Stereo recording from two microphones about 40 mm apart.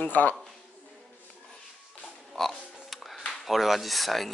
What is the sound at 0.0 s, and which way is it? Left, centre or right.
Speech, left.